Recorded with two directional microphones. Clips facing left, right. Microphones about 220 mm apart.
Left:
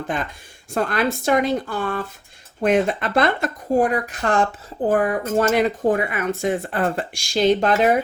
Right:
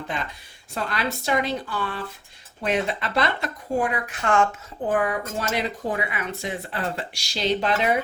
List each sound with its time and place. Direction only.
0.1 s speech: 50° left (ahead or behind)